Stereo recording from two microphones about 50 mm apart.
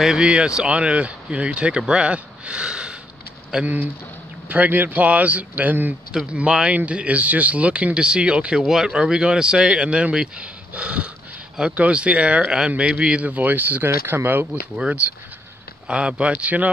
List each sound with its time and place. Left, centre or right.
0.2 s speech: right
3.6 s a man's voice: right
6.3 s speech: right
8.6 s speech: centre; by 14.5 s right
15.9 s speech: right